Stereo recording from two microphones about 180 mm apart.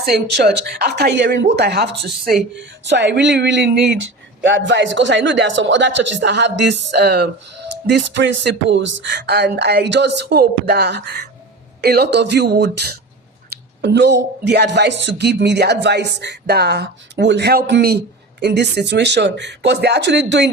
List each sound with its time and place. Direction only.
0.0 s speech: 65° right (ahead or behind)
2.8 s speech: 75° right (ahead or behind)
4.4 s a man's voice: 90° right; by 7.3 s 65° right (ahead or behind)
7.9 s a woman's voice: 85° right